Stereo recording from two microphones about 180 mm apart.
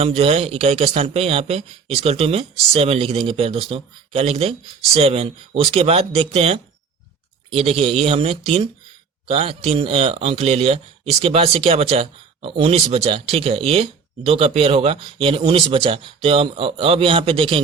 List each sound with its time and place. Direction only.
0.0 s speech: 35° right (ahead or behind)